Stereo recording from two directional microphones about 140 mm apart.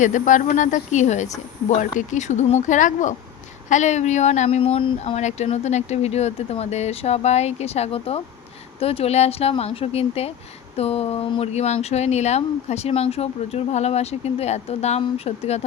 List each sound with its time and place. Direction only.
0.0 s speech: 65° left (ahead or behind); by 5.1 s 40° left (ahead or behind)
5.1 s speech: 55° left (ahead or behind)